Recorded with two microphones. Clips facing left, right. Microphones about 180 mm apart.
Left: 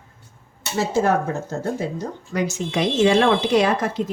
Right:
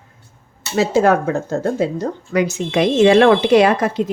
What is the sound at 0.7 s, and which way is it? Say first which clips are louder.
Speech: right 5 dB; 80° right.